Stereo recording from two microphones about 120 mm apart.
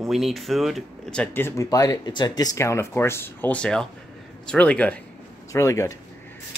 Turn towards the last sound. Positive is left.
turn(degrees=25)  # may be behind; listen again after turning